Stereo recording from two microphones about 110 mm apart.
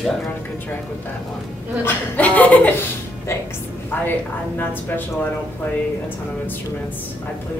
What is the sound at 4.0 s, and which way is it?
A woman's voice, 20° left (ahead or behind).